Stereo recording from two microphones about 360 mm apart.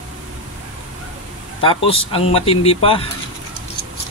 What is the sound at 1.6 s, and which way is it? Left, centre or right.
Speech, centre.